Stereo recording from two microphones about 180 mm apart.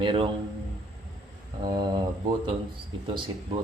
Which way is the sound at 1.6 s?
25° right (ahead or behind).